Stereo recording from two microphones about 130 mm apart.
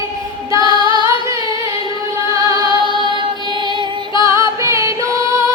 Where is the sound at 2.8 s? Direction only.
40° right (ahead or behind).